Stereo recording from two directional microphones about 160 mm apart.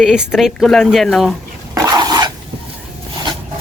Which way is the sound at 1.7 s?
25° right (ahead or behind).